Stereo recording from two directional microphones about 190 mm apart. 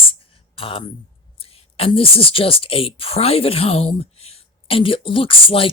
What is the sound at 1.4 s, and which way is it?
A woman's voice, 30° left (ahead or behind).